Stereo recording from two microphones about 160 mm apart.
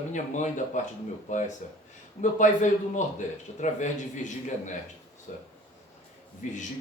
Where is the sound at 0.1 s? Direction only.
50° left (ahead or behind).